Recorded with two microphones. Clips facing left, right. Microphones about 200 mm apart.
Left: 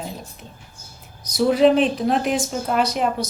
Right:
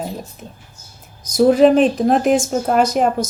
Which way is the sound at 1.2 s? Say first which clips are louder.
Right 4 dB; 45° right (ahead or behind).